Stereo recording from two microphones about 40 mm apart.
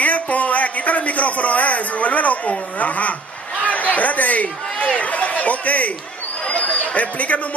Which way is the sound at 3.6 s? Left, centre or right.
Left.